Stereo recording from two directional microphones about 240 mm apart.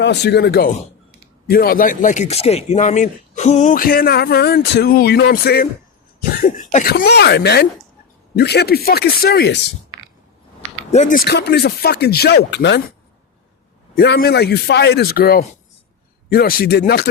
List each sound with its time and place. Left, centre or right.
0.0 s speech: left
6.4 s cough: left
7.0 s speech: left
10.9 s speech: left
11.3 s speech: left
13.9 s speech: left